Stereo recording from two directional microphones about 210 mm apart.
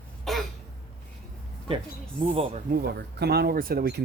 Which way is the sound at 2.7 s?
50° right (ahead or behind).